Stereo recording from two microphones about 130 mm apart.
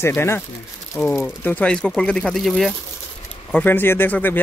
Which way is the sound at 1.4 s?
15° left (ahead or behind).